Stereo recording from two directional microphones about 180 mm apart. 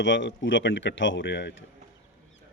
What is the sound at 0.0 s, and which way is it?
Speech, 80° left.